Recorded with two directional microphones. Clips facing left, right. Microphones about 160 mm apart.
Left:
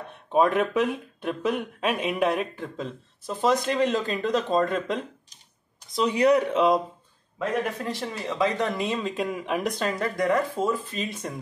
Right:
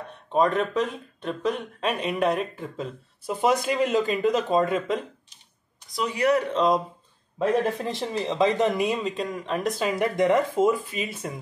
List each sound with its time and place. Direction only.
0.3 s speech: 5° left (ahead or behind)
5.9 s speech: 20° left (ahead or behind)
7.3 s speech: 25° right (ahead or behind); by 9.1 s 10° right (ahead or behind)
9.1 s speech: 5° left (ahead or behind)
9.9 s speech: 20° right (ahead or behind)